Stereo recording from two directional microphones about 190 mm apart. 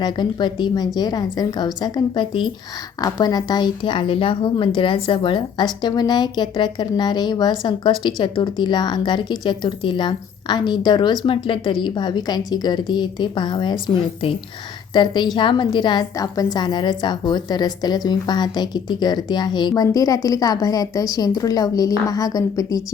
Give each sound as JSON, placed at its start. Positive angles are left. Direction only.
{"t": 0.0, "sound": "a woman's voice", "side_deg": 25}